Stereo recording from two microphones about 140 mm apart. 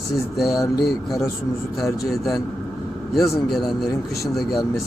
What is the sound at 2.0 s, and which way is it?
Speech, centre (ahead or behind).